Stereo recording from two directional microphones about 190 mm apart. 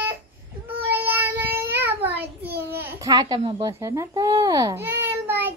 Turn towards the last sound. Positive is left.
turn(degrees=-10)  # may be behind; listen again after turning